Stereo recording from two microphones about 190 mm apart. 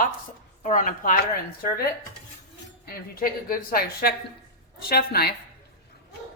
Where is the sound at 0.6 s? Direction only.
40° left (ahead or behind).